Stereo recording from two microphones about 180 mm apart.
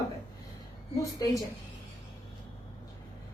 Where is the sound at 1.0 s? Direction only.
20° left (ahead or behind).